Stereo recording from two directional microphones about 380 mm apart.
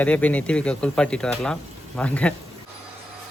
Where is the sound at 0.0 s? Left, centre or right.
Centre.